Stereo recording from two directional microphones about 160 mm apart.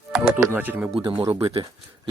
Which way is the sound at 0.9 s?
35° right (ahead or behind).